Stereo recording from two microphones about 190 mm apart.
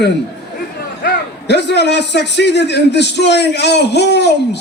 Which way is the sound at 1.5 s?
65° left (ahead or behind).